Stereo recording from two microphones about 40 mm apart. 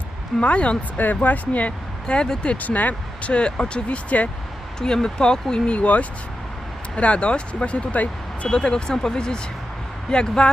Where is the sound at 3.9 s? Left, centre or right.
Left.